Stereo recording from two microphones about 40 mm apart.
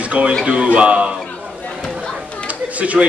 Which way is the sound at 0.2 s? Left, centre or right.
Right.